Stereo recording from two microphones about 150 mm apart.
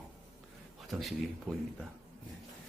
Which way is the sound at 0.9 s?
Centre (ahead or behind).